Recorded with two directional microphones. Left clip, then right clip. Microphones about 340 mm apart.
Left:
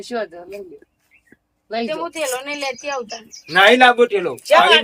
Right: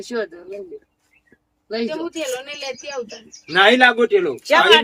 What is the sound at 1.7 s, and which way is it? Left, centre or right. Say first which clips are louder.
A man's voice: left 1 dB; centre.